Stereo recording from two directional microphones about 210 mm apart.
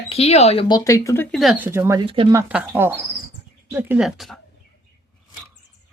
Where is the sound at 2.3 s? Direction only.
5° right (ahead or behind).